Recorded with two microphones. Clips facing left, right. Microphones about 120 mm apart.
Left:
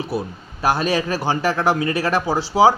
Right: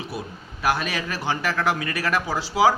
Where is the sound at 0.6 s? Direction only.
30° left (ahead or behind).